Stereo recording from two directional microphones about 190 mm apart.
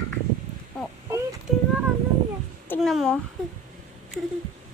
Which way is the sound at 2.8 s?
Centre (ahead or behind).